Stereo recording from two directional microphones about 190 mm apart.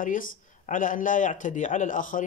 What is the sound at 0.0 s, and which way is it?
Speech, 45° left (ahead or behind).